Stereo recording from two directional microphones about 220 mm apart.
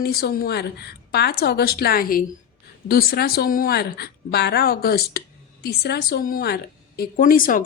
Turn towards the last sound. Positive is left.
turn(degrees=40)  # may be behind; listen again after turning